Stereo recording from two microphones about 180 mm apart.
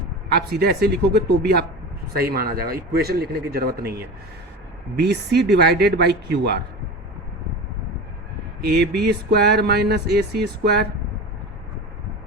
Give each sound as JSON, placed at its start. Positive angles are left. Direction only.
{"t": 0.3, "sound": "speech", "side_deg": -60}
{"t": 8.6, "sound": "speech", "side_deg": -65}